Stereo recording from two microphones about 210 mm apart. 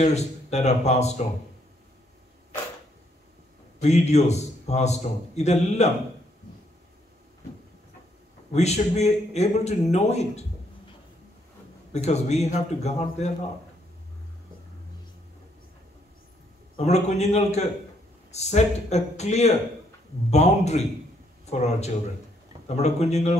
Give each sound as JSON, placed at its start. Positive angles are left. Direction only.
{"t": 0.0, "sound": "a man's voice", "side_deg": 30}
{"t": 3.8, "sound": "a man's voice", "side_deg": 30}
{"t": 8.5, "sound": "a man's voice", "side_deg": 30}
{"t": 11.9, "sound": "a man's voice", "side_deg": 30}
{"t": 16.7, "sound": "a man's voice", "side_deg": 30}